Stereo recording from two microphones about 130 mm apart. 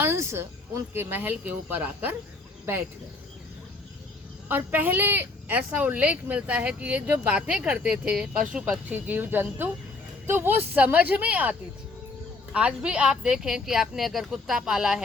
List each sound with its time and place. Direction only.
0.0 s speech: 20° right (ahead or behind)
4.4 s speech: 15° right (ahead or behind)
12.5 s a woman's voice: 10° right (ahead or behind)